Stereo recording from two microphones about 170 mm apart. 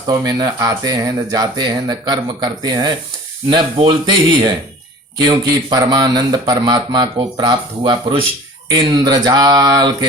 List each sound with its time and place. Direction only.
0.1 s speech: 20° right (ahead or behind)